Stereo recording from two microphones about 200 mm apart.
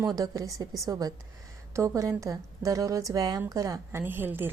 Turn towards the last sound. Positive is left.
turn(degrees=-10)  # may be behind; listen again after turning